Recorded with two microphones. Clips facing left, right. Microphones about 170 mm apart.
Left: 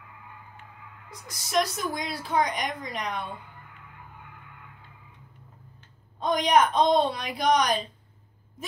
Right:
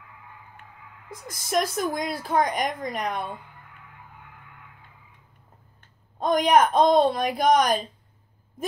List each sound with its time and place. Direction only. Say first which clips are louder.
1.2 s a woman's voice: right 1 dB; 50° right (ahead or behind)
5.8 s speech: right 4 dB; 50° right (ahead or behind)